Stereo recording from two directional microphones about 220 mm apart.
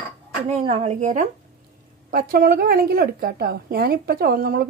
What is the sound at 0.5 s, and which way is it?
A woman's voice, 30° right (ahead or behind).